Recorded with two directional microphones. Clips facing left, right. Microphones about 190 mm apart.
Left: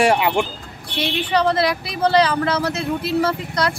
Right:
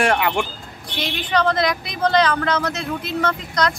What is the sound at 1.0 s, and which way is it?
Speech, 30° left (ahead or behind).